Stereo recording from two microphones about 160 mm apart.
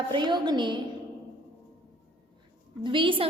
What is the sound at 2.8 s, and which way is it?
Speech, 30° right (ahead or behind).